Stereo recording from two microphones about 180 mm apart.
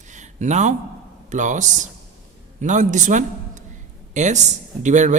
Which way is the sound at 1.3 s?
45° right (ahead or behind).